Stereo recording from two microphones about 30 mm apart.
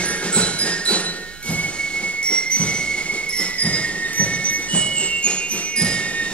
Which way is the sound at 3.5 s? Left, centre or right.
Left.